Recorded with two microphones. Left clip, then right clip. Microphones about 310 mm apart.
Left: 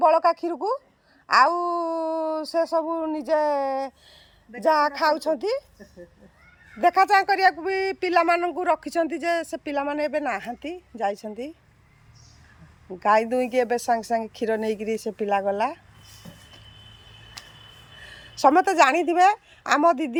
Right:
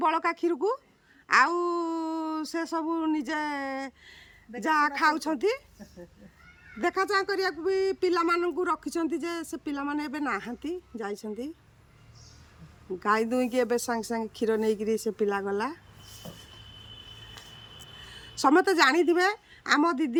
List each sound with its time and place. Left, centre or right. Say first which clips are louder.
0.0 s speech: left 8 dB; centre
1.3 s speech: left 4 dB; centre
6.7 s speech: left 9 dB; centre
13.0 s speech: left 6 dB; centre
17.4 s a sound: left 5 dB; left
18.0 s a woman's voice: left 6 dB; centre